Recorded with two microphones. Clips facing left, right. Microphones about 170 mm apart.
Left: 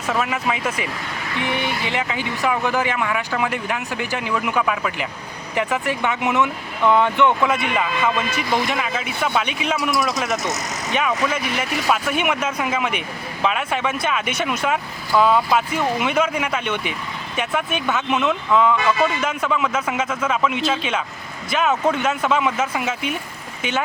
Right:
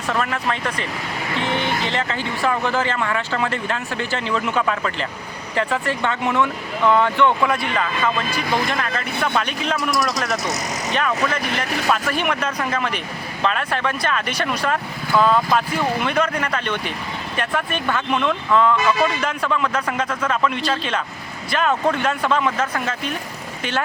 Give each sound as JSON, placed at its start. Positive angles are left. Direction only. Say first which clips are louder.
{"t": 0.1, "sound": "speech", "louder": "left 1 dB", "side_deg": 5}